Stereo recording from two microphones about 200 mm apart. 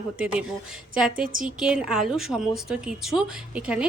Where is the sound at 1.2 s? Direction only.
45° right (ahead or behind).